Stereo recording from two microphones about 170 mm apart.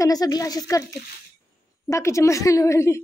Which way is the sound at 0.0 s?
20° left (ahead or behind).